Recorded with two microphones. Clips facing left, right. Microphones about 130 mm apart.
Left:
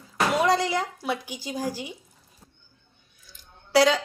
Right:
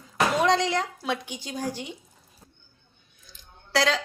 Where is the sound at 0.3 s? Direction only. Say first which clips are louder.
Left 1 dB; 5° left (ahead or behind).